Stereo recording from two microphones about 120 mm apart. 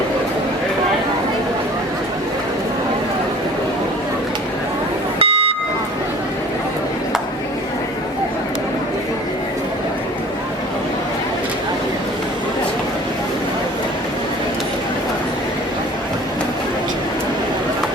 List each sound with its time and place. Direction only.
5.2 s buzzer: 55° right (ahead or behind)